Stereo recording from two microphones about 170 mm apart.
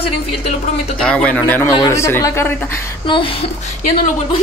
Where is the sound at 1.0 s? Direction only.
5° left (ahead or behind).